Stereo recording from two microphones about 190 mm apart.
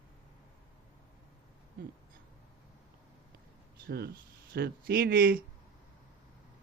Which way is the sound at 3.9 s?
55° right (ahead or behind).